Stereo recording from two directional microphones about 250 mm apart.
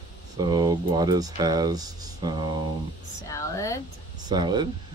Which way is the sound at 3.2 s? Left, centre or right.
Centre.